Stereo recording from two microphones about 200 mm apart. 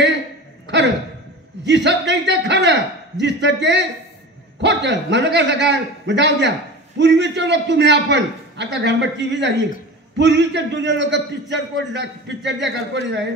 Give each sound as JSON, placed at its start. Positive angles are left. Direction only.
{"t": 1.7, "sound": "a man's voice", "side_deg": -60}